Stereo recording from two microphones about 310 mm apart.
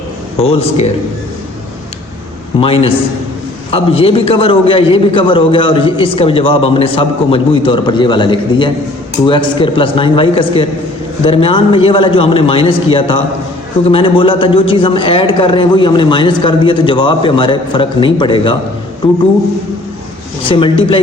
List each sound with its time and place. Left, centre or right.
0.5 s a man's voice: centre
2.6 s a man's voice: centre
20.5 s a man's voice: centre